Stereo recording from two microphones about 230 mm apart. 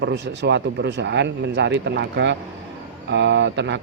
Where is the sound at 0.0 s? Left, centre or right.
Right.